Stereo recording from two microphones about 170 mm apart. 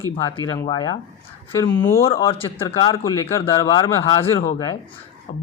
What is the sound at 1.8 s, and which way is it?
Speech, 15° left (ahead or behind).